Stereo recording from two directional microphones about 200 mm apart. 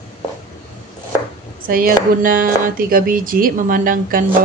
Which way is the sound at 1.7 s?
45° right (ahead or behind).